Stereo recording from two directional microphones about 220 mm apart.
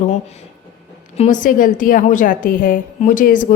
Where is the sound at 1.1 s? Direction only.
30° left (ahead or behind).